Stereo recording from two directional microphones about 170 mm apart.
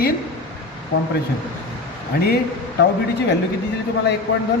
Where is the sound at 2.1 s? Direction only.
65° left (ahead or behind).